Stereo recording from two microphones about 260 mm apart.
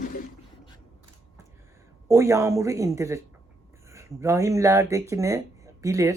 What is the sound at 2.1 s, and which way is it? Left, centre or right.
A woman's voice, centre.